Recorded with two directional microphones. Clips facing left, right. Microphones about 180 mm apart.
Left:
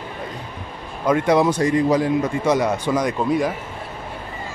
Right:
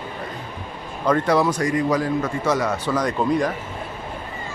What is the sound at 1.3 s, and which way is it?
A man's voice, 25° left (ahead or behind).